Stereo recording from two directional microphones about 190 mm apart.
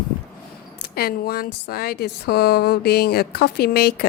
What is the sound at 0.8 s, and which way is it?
Speech, 55° left (ahead or behind).